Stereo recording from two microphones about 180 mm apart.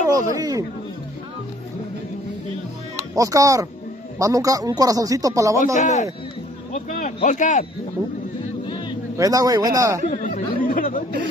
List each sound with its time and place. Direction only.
0.1 s speech: 20° right (ahead or behind)
3.0 s speech: 20° right (ahead or behind)
5.8 s speech: 40° left (ahead or behind)
8.6 s a sound: 25° left (ahead or behind)
9.1 s speech: 20° right (ahead or behind)
10.0 s chatter: 45° left (ahead or behind)